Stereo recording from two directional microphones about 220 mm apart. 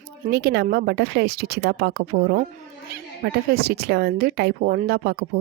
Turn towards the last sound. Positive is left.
turn(degrees=-45)  # may be behind; listen again after turning